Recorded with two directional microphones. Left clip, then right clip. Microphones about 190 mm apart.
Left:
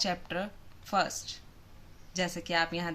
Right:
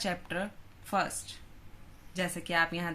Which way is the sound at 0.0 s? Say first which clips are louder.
Left 2 dB; 15° right (ahead or behind).